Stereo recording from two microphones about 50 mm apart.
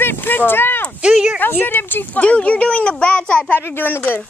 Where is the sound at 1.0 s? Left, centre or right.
Centre.